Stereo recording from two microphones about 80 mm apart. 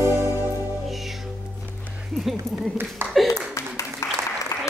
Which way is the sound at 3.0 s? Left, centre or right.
Right.